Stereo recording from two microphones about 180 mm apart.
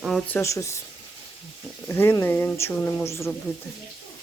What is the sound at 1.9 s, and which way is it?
Speech, 15° left (ahead or behind).